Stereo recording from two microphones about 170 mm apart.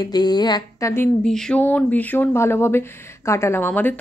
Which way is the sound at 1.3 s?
5° left (ahead or behind).